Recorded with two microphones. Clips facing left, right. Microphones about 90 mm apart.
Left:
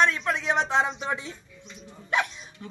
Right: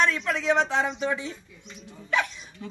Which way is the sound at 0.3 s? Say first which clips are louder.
Right 1 dB; 25° left (ahead or behind).